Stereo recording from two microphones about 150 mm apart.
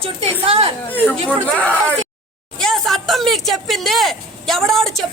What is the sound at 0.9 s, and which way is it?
Speech, 10° left (ahead or behind).